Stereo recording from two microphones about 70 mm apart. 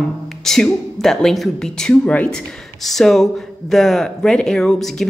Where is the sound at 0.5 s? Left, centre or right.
Centre.